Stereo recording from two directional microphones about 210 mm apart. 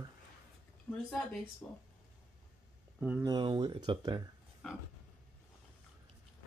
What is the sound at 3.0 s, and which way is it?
Speech, 10° right (ahead or behind).